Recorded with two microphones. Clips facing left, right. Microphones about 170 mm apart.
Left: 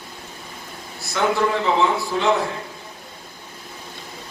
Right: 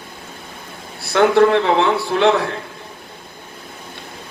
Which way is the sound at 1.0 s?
65° right (ahead or behind).